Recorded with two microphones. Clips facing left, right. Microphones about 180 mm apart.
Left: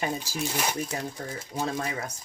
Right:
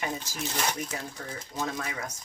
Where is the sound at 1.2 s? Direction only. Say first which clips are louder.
Left 2 dB; 35° left (ahead or behind).